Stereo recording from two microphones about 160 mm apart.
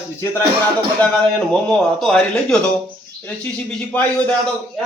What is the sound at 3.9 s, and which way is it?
Speech, 10° left (ahead or behind).